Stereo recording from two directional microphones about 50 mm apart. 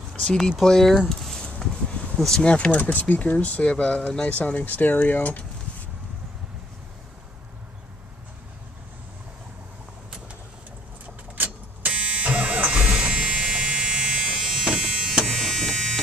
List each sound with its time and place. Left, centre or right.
0.2 s speech: centre
1.0 s a sound: centre
2.1 s speech: centre
2.4 s speech: left
2.8 s speech: left; by 4.4 s centre
4.4 s speech: left
11.3 s printer: right
11.9 s a sound: right
13.4 s electric shaver: centre
15.2 s electric shaver: centre